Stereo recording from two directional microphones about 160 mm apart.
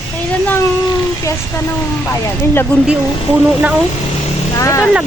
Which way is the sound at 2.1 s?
15° left (ahead or behind).